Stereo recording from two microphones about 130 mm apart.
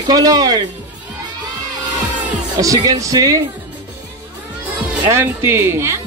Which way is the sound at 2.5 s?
30° right (ahead or behind).